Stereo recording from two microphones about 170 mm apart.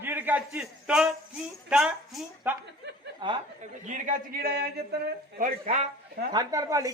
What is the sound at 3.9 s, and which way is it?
A man's voice, 55° right (ahead or behind).